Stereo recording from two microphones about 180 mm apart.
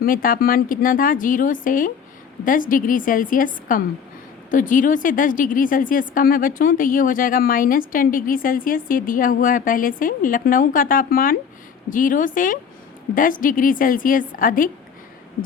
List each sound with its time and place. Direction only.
0.0 s a woman's voice: 50° left (ahead or behind)